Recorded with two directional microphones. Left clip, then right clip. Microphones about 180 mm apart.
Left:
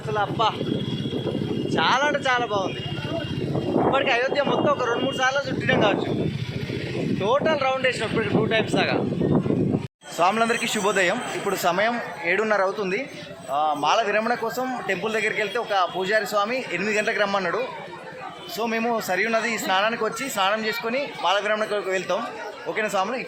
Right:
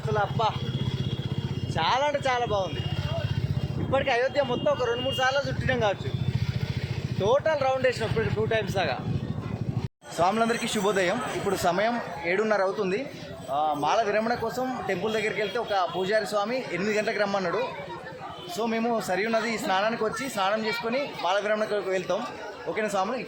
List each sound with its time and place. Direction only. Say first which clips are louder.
0.1 s speech: left 3 dB; 10° right (ahead or behind)
1.7 s speech: left 4 dB; 15° right (ahead or behind)
3.9 s speech: right 2 dB; 10° right (ahead or behind)
7.2 s speech: left 1 dB; 20° right (ahead or behind)
10.2 s a man's voice: left 3 dB; centre (ahead or behind)
18.6 s a man's voice: left 3 dB; centre (ahead or behind)